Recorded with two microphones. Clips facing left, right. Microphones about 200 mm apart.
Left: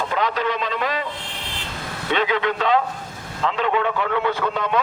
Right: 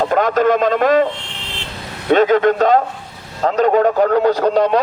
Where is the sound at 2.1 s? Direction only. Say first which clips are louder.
Right 10 dB; 45° right (ahead or behind).